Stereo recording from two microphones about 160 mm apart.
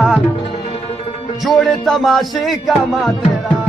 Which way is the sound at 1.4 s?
Centre (ahead or behind).